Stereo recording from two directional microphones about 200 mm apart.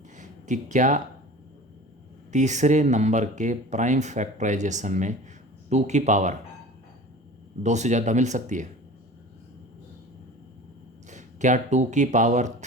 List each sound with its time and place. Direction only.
0.2 s speech: 40° right (ahead or behind)
2.3 s speech: 35° right (ahead or behind)
7.6 s speech: 35° right (ahead or behind)
11.1 s speech: 40° right (ahead or behind)